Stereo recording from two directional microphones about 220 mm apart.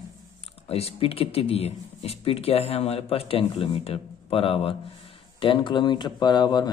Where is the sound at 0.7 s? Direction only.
25° left (ahead or behind).